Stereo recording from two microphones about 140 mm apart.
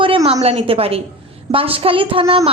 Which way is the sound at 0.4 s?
45° right (ahead or behind).